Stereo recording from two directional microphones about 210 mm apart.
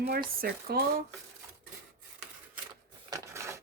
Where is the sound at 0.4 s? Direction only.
45° right (ahead or behind).